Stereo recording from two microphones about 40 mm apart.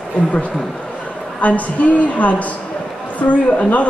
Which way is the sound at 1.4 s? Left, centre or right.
Left.